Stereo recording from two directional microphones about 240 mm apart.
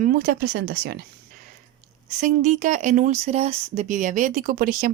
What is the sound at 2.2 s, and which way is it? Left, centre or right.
Speech, right.